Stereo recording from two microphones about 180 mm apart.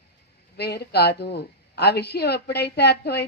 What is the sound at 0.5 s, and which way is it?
A woman's voice, 65° left (ahead or behind).